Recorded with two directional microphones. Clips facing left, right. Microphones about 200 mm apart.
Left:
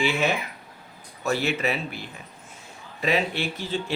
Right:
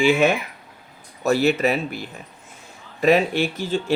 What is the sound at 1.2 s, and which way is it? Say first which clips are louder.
Speech: right 7 dB; 40° right (ahead or behind).